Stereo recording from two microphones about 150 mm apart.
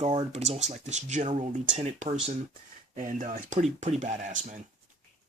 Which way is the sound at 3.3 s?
50° right (ahead or behind).